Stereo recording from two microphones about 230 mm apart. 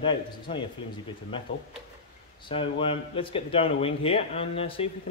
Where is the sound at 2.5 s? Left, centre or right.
Left.